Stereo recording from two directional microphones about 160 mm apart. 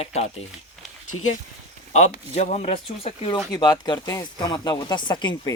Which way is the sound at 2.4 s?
40° left (ahead or behind).